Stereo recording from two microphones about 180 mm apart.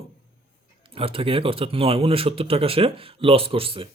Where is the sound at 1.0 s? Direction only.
30° right (ahead or behind).